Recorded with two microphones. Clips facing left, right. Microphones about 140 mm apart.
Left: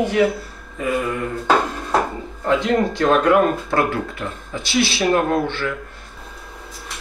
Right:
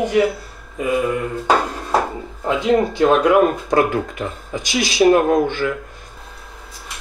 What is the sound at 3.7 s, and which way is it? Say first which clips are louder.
Speech: right 3 dB; 15° right (ahead or behind).